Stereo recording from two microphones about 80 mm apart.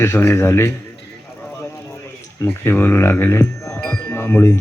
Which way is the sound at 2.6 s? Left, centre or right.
Left.